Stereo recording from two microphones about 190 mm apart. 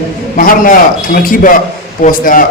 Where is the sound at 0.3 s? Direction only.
45° left (ahead or behind).